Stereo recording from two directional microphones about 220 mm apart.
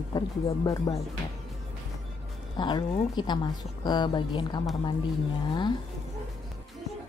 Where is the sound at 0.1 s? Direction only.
20° left (ahead or behind).